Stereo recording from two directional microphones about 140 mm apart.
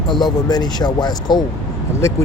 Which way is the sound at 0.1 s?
30° left (ahead or behind).